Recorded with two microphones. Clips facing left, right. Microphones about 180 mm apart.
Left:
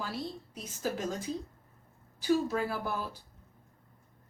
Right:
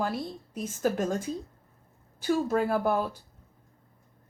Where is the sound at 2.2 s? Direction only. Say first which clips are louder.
Right 3 dB; 50° right (ahead or behind).